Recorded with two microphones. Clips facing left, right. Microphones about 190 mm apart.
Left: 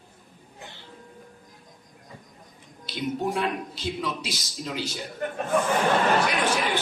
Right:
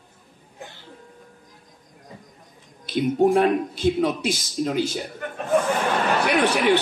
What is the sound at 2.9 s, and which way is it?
Speech, 50° right (ahead or behind).